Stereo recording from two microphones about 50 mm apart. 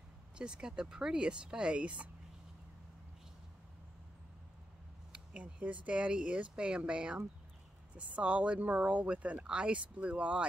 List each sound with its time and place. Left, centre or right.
0.4 s speech: centre
5.1 s speech: right